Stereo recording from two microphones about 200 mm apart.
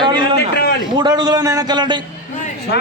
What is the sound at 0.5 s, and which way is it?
Speech, 50° left (ahead or behind).